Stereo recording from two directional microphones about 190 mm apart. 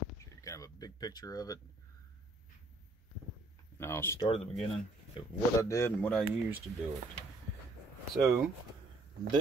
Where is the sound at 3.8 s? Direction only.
15° left (ahead or behind).